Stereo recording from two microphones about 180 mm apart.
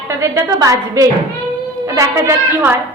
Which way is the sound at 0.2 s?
20° right (ahead or behind).